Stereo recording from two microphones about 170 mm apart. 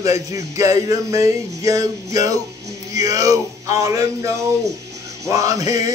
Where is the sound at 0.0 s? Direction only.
20° right (ahead or behind).